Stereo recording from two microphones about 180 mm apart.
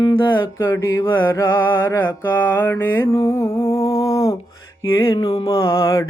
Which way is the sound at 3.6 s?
30° left (ahead or behind).